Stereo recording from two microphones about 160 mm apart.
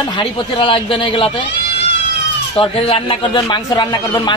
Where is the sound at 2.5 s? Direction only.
35° left (ahead or behind).